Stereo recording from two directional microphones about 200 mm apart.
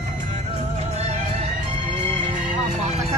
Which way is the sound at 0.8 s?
35° right (ahead or behind).